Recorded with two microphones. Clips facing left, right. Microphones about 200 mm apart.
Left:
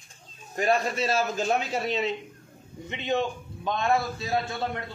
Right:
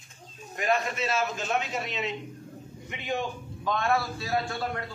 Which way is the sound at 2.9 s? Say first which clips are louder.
Left 4 dB; 25° left (ahead or behind).